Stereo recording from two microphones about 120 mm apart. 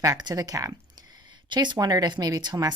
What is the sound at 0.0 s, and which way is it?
Speech, 30° right (ahead or behind).